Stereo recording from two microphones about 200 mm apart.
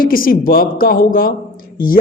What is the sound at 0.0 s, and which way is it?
A man's voice, 45° left (ahead or behind).